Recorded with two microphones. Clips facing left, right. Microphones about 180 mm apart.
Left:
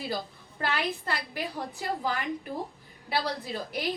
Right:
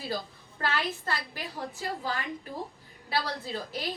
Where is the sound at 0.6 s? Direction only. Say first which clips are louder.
Left 1 dB; 15° left (ahead or behind).